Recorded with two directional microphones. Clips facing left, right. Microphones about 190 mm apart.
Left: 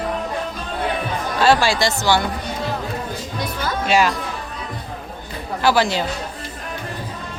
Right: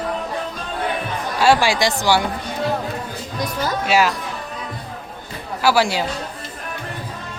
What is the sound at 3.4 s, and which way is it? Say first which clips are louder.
Music: right 3 dB; 40° right (ahead or behind).